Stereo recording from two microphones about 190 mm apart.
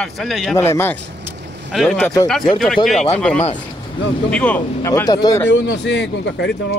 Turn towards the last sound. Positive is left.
turn(degrees=65)  # may be behind; listen again after turning